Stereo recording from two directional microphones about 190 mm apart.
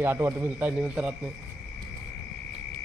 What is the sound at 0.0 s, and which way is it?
A man's voice, 10° right (ahead or behind).